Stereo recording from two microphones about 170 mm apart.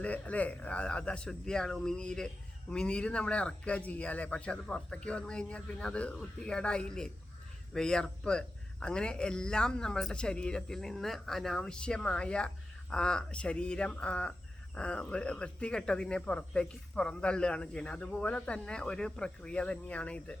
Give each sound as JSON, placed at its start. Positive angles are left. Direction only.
{"t": 0.0, "sound": "a man's voice", "side_deg": 10}